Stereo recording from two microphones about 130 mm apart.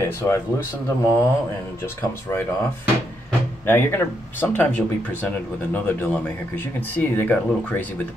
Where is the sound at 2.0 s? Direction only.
15° left (ahead or behind).